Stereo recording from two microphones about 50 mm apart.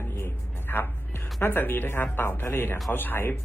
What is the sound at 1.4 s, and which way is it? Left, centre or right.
Speech, left.